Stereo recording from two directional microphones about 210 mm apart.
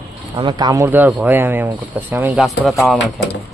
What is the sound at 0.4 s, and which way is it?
Speech, 20° right (ahead or behind).